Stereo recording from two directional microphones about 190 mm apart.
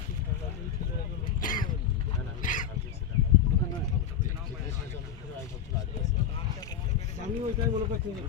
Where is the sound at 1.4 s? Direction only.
45° left (ahead or behind).